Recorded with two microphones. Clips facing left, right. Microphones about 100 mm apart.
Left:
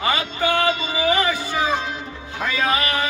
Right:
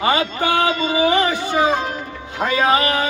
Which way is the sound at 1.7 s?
45° right (ahead or behind).